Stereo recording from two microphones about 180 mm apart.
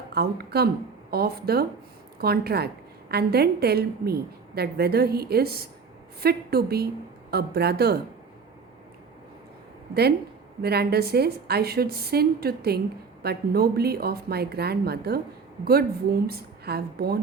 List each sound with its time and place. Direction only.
0.1 s a woman's voice: 60° right (ahead or behind)
9.9 s a woman's voice: 65° right (ahead or behind)